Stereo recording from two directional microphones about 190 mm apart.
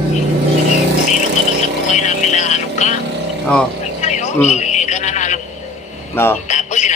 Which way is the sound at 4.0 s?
40° left (ahead or behind).